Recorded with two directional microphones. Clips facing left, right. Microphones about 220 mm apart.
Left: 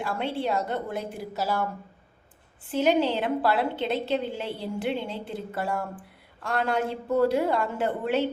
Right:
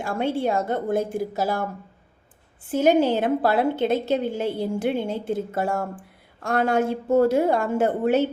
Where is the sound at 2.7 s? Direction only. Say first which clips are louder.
Right 4 dB; 45° right (ahead or behind).